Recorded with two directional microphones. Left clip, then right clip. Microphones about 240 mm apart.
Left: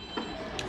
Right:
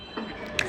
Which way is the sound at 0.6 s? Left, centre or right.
Right.